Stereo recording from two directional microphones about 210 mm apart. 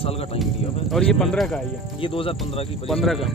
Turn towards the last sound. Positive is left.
turn(degrees=0)  # may be behind; listen again after turning